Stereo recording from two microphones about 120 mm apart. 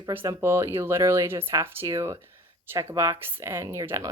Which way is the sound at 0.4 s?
20° right (ahead or behind).